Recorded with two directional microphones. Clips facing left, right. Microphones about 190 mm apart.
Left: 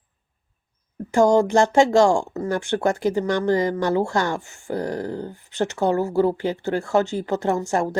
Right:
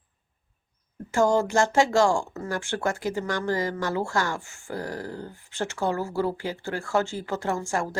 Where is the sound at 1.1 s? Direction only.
20° left (ahead or behind).